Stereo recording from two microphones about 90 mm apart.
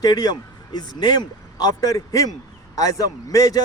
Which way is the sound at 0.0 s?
45° left (ahead or behind).